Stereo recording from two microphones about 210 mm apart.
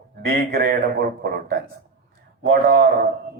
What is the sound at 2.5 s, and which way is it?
Speech, 45° right (ahead or behind).